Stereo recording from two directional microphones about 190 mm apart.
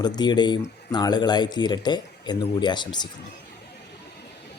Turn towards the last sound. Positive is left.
turn(degrees=25)  # may be behind; listen again after turning